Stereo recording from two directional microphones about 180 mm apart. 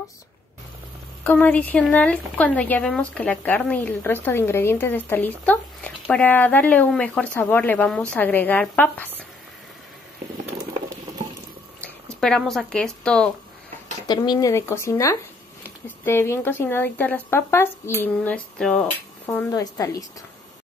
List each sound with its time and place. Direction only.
1.2 s speech: 10° left (ahead or behind)
11.8 s speech: 5° left (ahead or behind)
14.0 s speech: 25° left (ahead or behind)